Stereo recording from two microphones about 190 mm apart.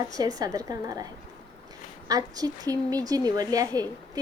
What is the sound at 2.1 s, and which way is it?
A woman's voice, 20° right (ahead or behind).